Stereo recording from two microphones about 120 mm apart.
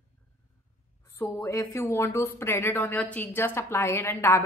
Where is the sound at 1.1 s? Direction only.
20° left (ahead or behind).